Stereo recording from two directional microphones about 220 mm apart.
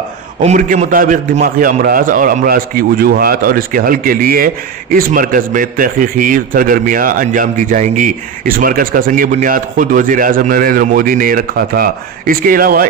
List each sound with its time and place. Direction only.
0.4 s a man's voice: 35° right (ahead or behind)